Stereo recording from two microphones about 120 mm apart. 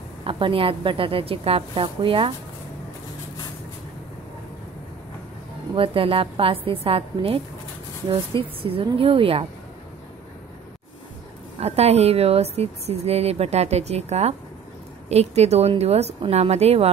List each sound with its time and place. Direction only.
0.2 s a woman's voice: 45° right (ahead or behind)
5.8 s a woman's voice: 50° right (ahead or behind)
11.6 s a woman's voice: 60° right (ahead or behind)